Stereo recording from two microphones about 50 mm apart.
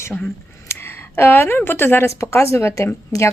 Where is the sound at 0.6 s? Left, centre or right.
Left.